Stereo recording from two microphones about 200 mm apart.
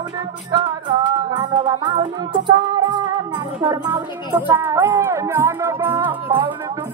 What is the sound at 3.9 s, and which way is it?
Speech, 10° right (ahead or behind).